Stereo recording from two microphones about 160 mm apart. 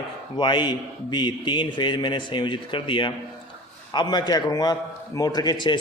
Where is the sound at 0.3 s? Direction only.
30° left (ahead or behind).